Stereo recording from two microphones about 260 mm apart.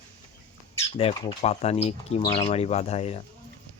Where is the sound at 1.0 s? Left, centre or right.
Left.